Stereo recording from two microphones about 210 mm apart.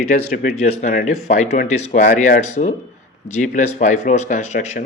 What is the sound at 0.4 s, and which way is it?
Speech, 35° left (ahead or behind).